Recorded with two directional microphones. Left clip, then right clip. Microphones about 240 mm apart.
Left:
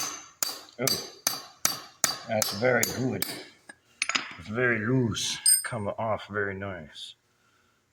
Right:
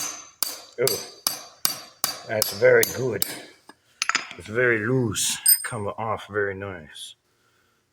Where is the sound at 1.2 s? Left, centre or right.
Centre.